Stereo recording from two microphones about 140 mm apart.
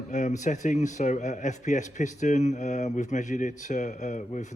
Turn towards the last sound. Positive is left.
turn(degrees=60)  # may be behind; listen again after turning